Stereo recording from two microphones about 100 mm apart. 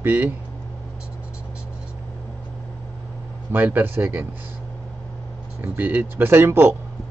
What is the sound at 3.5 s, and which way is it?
Speech, 20° right (ahead or behind).